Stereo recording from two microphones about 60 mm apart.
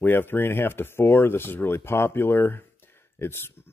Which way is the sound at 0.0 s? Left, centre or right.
Left.